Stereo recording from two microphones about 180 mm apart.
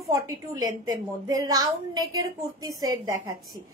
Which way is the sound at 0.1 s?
20° right (ahead or behind).